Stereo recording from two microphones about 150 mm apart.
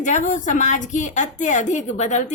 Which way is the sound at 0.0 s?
55° left (ahead or behind).